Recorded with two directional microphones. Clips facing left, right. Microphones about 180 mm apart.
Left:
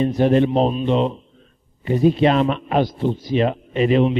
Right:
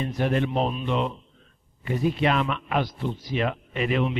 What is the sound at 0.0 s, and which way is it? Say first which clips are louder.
A man's voice: left 9 dB; 30° left (ahead or behind).